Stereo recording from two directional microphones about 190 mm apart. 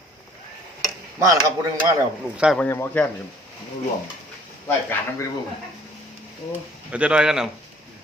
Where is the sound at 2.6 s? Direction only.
10° left (ahead or behind).